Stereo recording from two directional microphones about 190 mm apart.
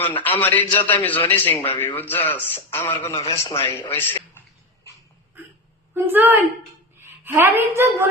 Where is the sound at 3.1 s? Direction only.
30° left (ahead or behind).